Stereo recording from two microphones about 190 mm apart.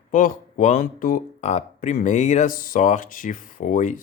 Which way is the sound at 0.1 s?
45° left (ahead or behind).